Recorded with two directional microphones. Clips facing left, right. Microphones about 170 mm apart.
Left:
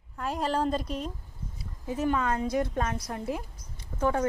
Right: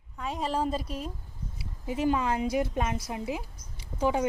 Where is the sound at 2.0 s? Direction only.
25° right (ahead or behind).